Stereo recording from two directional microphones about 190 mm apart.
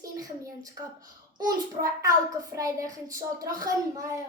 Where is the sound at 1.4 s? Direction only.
20° right (ahead or behind).